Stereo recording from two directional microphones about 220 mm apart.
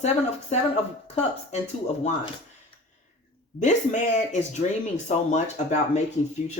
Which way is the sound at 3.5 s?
35° left (ahead or behind).